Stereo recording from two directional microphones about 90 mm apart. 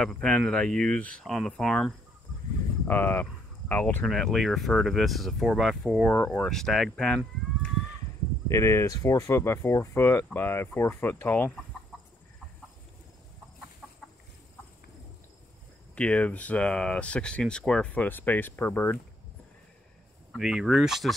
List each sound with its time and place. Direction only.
0.0 s speech: 10° left (ahead or behind)
2.9 s speech: 20° left (ahead or behind)
4.0 s speech: 5° left (ahead or behind)
6.0 s speech: 15° left (ahead or behind)
6.5 s speech: 5° left (ahead or behind)
8.5 s speech: 30° left (ahead or behind)
15.9 s speech: 15° left (ahead or behind)
20.3 s speech: 5° right (ahead or behind)